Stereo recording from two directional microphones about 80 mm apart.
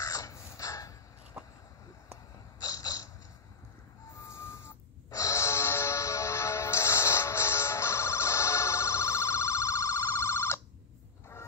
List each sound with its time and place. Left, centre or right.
0.0 s crow: left
2.6 s a sound: left
5.1 s music: left